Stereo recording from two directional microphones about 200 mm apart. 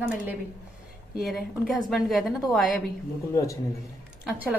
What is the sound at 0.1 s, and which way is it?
A woman's voice, 5° right (ahead or behind).